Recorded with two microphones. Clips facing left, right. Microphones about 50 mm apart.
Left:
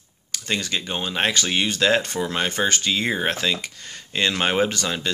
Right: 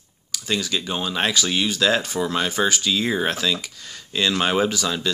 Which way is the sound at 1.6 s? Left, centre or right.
Left.